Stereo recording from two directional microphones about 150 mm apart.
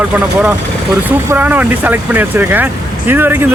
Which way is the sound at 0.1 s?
10° right (ahead or behind).